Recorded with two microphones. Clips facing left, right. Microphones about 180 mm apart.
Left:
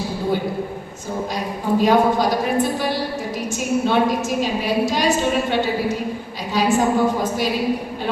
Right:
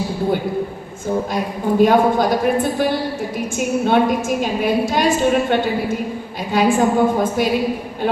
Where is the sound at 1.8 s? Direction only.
50° right (ahead or behind).